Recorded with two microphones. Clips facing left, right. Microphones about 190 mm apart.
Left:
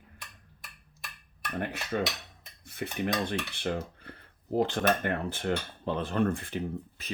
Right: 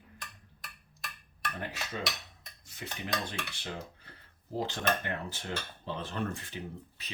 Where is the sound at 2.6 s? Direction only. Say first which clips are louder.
Left 9 dB; 60° left (ahead or behind).